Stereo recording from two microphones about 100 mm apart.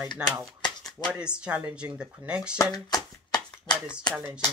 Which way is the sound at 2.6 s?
40° left (ahead or behind).